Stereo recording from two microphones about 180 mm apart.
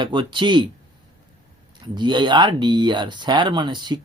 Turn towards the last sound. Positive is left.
turn(degrees=-25)  # may be behind; listen again after turning